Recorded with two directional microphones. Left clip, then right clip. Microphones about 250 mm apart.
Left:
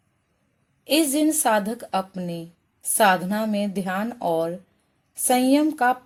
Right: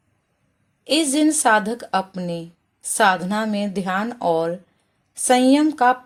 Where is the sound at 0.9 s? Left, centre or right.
Centre.